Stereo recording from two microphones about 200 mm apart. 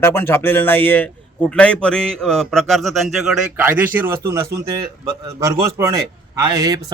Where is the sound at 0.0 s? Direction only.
10° left (ahead or behind).